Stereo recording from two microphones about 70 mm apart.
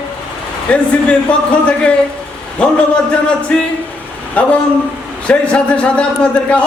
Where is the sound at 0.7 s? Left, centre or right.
Centre.